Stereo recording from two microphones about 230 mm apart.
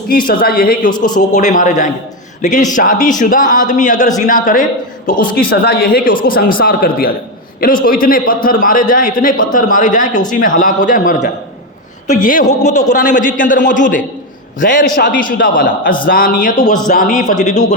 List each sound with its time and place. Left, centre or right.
0.1 s a man's voice: left
0.9 s a man's voice: centre
1.3 s a man's voice: left